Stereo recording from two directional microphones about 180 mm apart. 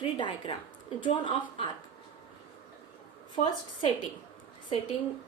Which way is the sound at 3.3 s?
25° left (ahead or behind).